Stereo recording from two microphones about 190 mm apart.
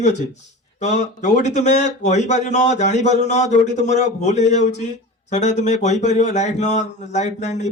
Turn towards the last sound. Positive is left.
turn(degrees=35)  # may be behind; listen again after turning